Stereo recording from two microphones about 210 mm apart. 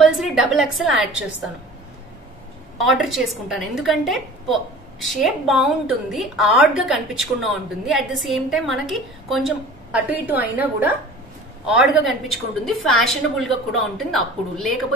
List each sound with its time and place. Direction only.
0.0 s a woman's voice: centre (ahead or behind)
2.8 s a woman's voice: centre (ahead or behind)